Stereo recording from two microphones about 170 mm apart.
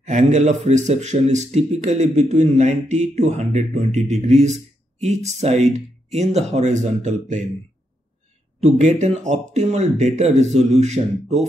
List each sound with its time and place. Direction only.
0.0 s a man's voice: 45° right (ahead or behind)
8.5 s a man's voice: 45° right (ahead or behind)